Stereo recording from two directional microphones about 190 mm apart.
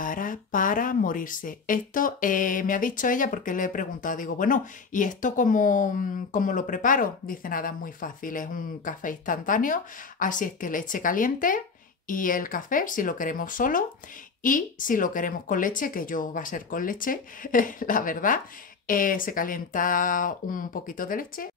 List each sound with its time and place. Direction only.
0.0 s speech: 45° left (ahead or behind)